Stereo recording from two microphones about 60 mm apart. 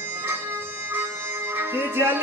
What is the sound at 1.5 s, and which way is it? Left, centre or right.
Music, right.